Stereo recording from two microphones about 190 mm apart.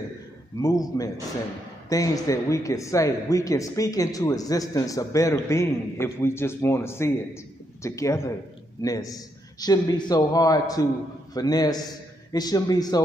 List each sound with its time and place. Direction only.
0.6 s a man's voice: 20° left (ahead or behind)